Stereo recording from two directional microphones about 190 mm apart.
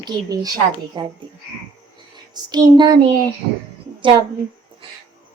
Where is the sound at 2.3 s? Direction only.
20° right (ahead or behind).